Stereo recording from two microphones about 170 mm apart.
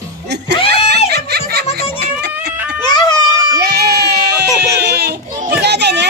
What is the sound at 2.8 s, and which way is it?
Music, 25° left (ahead or behind).